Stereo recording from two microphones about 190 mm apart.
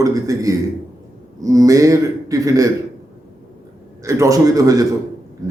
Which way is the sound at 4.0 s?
15° right (ahead or behind).